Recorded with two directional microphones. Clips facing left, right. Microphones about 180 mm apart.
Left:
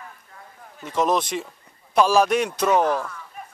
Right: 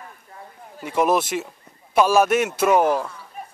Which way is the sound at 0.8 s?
10° right (ahead or behind).